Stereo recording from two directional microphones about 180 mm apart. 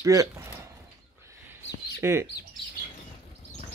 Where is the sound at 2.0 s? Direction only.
15° right (ahead or behind).